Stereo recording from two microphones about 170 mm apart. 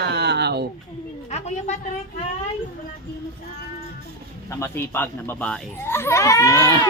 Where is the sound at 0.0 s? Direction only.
80° right.